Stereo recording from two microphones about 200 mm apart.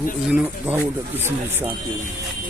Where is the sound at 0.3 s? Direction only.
10° right (ahead or behind).